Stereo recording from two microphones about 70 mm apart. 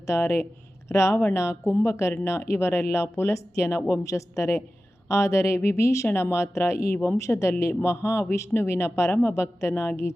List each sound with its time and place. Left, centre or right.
0.0 s speech: left